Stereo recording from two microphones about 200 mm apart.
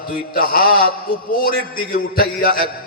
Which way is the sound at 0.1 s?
45° left (ahead or behind).